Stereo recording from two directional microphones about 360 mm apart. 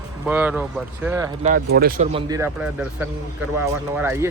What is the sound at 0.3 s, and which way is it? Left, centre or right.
Speech, centre.